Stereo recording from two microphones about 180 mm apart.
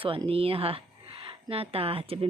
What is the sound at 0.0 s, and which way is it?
Speech, 30° right (ahead or behind).